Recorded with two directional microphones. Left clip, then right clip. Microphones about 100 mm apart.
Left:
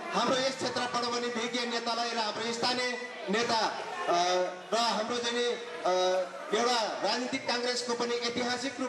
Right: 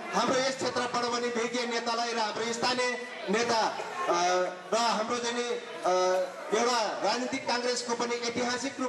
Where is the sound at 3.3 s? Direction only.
5° right (ahead or behind).